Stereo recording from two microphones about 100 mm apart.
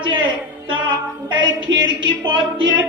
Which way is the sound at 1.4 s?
50° right (ahead or behind).